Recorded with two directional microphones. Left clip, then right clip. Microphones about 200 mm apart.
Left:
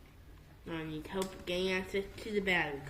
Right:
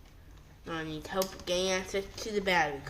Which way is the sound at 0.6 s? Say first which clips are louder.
Right 4 dB; 35° right (ahead or behind).